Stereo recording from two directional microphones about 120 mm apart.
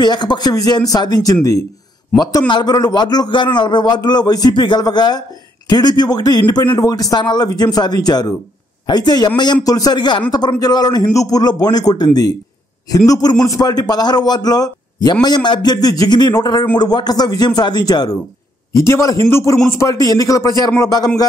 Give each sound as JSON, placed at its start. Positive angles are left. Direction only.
{"t": 0.0, "sound": "a man's voice", "side_deg": 40}